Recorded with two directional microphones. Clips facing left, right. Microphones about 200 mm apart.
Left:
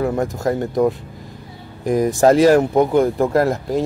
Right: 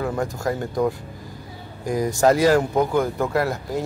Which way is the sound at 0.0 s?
30° left (ahead or behind).